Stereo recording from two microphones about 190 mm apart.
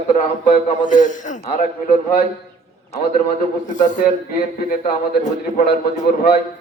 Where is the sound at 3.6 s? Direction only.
40° left (ahead or behind).